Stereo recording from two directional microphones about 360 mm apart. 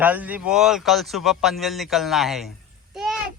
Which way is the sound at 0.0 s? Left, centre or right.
Centre.